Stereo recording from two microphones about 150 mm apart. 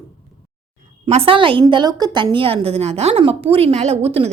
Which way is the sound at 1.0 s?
40° right (ahead or behind).